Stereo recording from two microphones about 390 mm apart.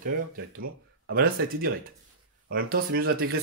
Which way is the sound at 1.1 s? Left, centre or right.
Right.